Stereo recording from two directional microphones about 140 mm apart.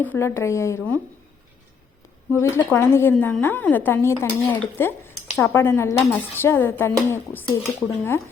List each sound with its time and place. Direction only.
0.0 s speech: 15° left (ahead or behind)
2.3 s speech: 20° left (ahead or behind)